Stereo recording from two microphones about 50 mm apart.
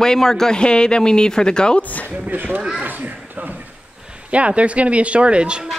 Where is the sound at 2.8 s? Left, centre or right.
Right.